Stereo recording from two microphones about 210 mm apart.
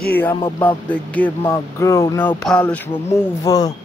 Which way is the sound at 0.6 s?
10° left (ahead or behind).